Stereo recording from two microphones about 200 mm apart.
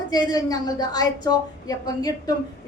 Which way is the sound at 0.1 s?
20° left (ahead or behind).